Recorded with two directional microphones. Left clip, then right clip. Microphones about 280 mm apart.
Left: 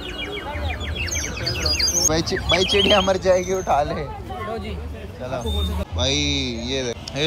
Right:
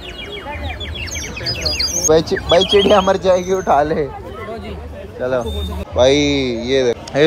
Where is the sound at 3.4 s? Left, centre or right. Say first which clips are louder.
Right 6 dB; right.